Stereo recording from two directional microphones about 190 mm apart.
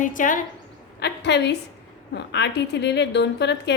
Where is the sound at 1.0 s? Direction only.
60° left (ahead or behind).